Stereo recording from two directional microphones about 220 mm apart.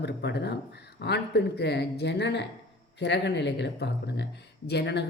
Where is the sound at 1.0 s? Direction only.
50° left (ahead or behind).